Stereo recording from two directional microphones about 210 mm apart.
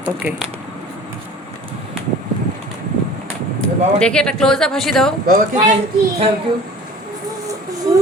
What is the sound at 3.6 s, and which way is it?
Speech, 5° left (ahead or behind).